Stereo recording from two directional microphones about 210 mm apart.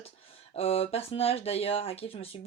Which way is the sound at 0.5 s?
30° left (ahead or behind).